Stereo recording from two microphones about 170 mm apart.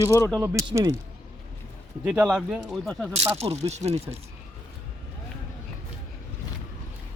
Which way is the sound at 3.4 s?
40° right (ahead or behind).